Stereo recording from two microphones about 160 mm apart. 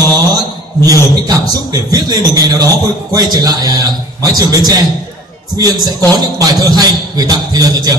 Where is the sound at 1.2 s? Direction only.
20° right (ahead or behind).